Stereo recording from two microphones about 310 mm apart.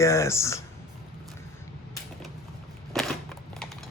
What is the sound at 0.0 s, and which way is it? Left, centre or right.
Speech, centre.